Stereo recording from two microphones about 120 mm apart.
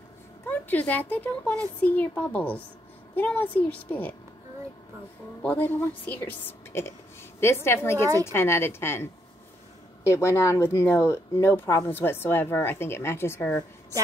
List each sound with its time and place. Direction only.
0.5 s a woman's voice: 15° left (ahead or behind)
5.4 s a woman's voice: 15° left (ahead or behind)